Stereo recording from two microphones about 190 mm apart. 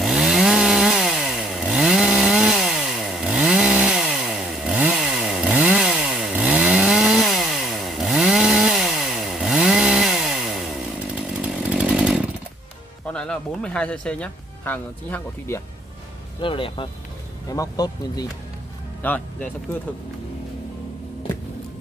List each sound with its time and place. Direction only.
0.0 s chainsaw: centre (ahead or behind)
13.0 s speech: 5° left (ahead or behind)
16.3 s speech: 25° left (ahead or behind); by 19.2 s 10° left (ahead or behind)